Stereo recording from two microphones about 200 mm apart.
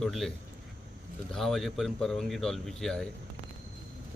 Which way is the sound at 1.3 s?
Centre (ahead or behind).